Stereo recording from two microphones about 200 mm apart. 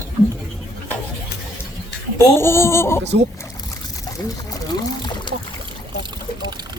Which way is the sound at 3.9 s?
15° left (ahead or behind).